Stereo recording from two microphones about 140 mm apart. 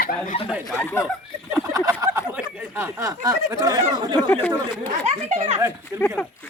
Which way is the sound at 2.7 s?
20° right (ahead or behind).